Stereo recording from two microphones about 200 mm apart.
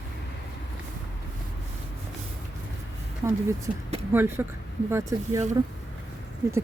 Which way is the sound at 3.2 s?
15° right (ahead or behind).